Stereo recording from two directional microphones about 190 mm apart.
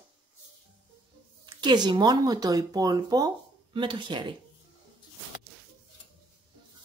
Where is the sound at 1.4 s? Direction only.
25° right (ahead or behind).